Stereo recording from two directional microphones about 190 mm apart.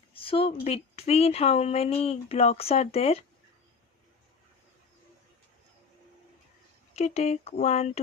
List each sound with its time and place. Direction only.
0.1 s a sound: 30° left (ahead or behind)
0.6 s speech: 30° left (ahead or behind)
6.9 s speech: 35° left (ahead or behind)